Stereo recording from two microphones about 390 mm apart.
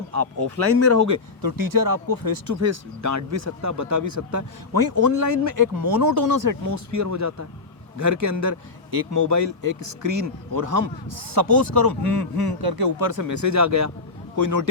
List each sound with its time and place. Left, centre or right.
0.1 s speech: right
1.4 s speech: right
2.6 s speech: right